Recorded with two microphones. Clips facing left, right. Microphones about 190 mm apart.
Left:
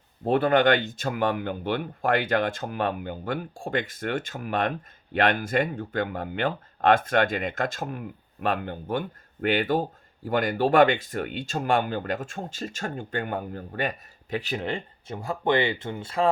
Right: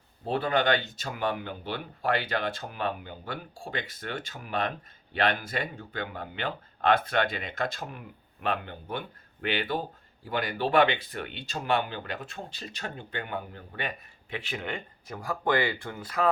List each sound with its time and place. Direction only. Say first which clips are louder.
0.3 s speech: left 6 dB; 50° left (ahead or behind); by 16.3 s 25° left (ahead or behind)